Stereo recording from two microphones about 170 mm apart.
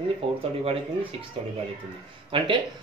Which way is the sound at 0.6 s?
35° right (ahead or behind).